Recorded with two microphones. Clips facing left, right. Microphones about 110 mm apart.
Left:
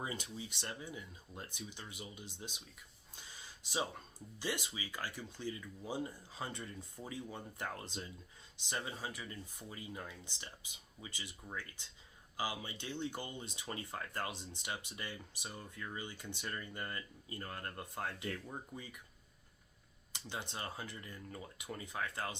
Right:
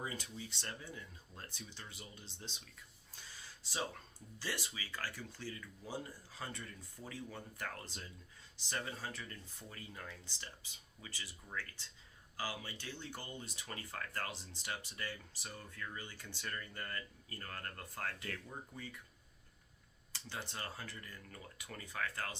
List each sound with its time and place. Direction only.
0.0 s speech: 20° left (ahead or behind)
20.1 s speech: 20° left (ahead or behind)